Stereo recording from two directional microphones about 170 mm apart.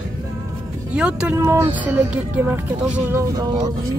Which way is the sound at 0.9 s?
5° right (ahead or behind).